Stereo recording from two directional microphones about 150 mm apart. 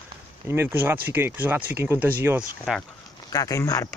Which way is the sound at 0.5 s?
15° right (ahead or behind).